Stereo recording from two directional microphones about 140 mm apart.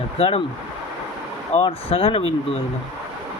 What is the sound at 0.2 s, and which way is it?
Speech, 45° left (ahead or behind).